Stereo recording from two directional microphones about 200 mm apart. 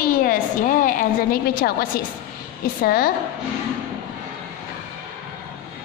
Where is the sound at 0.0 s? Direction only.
45° left (ahead or behind).